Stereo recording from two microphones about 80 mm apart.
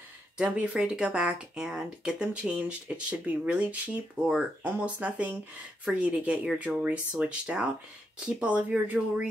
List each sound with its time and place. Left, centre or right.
0.4 s speech: centre